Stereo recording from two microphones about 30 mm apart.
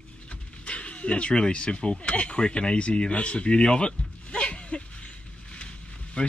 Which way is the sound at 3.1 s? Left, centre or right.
Left.